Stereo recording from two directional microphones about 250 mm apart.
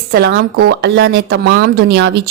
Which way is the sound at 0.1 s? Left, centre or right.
Right.